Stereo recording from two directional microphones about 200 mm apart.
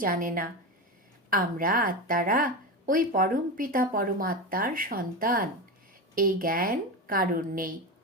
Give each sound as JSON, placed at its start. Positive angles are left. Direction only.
{"t": 0.0, "sound": "speech", "side_deg": -45}